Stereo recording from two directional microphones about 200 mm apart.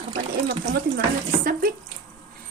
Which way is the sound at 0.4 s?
55° right (ahead or behind).